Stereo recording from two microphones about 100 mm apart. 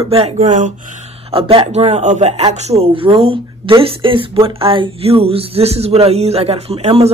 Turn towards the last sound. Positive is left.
turn(degrees=-90)